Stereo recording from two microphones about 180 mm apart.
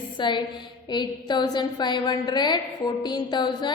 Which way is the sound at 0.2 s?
25° left (ahead or behind).